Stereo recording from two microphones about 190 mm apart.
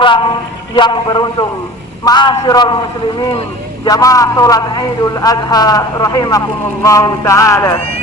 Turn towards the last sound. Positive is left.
turn(degrees=15)  # may be behind; listen again after turning